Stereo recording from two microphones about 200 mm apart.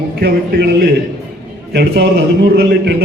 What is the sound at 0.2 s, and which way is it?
Speech, 50° right (ahead or behind).